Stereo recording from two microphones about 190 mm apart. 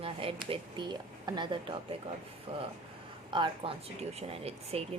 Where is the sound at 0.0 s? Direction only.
30° right (ahead or behind).